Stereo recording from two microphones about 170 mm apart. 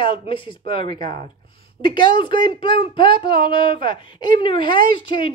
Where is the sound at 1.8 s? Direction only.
25° left (ahead or behind).